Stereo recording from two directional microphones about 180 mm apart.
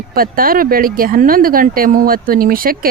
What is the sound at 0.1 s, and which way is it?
A woman's voice, 55° right (ahead or behind).